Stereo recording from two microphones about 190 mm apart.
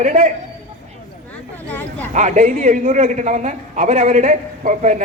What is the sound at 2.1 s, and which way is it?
A man's voice, 40° right (ahead or behind).